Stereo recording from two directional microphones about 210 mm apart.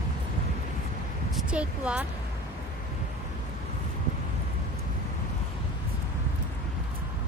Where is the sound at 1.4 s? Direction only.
5° right (ahead or behind).